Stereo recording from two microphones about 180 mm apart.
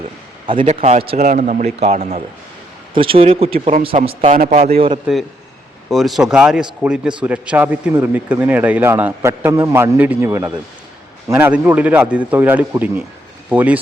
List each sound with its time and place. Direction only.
0.6 s a man's voice: 40° right (ahead or behind)
5.1 s a man's voice: 5° right (ahead or behind)